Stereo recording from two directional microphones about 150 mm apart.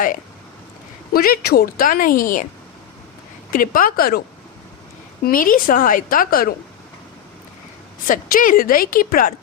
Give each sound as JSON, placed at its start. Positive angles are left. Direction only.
{"t": 1.1, "sound": "a woman's voice", "side_deg": 80}
{"t": 3.5, "sound": "a woman's voice", "side_deg": 70}
{"t": 5.2, "sound": "a woman's voice", "side_deg": 70}
{"t": 8.0, "sound": "a woman's voice", "side_deg": 65}